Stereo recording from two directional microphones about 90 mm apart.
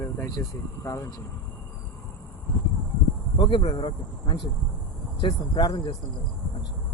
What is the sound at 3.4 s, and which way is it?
Speech, 75° left (ahead or behind).